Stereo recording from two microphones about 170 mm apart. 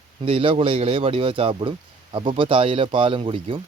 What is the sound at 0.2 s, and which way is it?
Speech, 30° right (ahead or behind).